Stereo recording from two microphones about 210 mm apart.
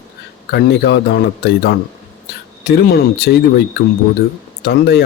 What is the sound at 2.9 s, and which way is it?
Speech, 50° left (ahead or behind).